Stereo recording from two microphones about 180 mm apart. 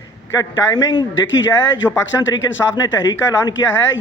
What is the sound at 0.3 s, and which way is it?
Speech, 20° left (ahead or behind).